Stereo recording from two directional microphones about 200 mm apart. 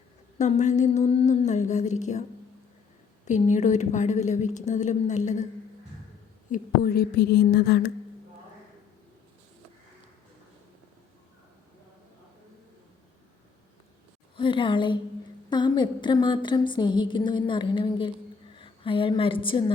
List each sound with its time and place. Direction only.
0.3 s a woman's voice: 35° left (ahead or behind)
3.2 s a woman's voice: 35° left (ahead or behind)
6.5 s a sound: 50° left (ahead or behind)
14.3 s a woman's voice: 25° left (ahead or behind)